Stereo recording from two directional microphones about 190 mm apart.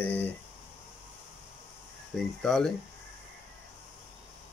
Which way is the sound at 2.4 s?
5° left (ahead or behind).